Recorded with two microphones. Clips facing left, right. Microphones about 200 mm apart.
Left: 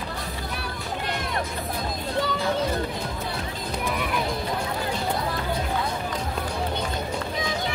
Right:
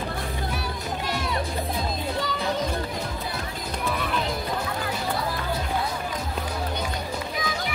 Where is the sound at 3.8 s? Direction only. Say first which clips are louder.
Even; 10° left (ahead or behind).